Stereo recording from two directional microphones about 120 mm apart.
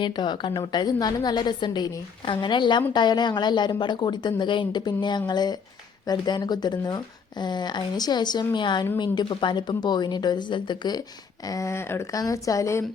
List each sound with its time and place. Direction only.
0.0 s a woman's voice: 40° left (ahead or behind)
11.4 s speech: 25° left (ahead or behind)